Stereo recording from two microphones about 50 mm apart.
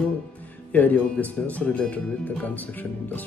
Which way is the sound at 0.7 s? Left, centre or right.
Left.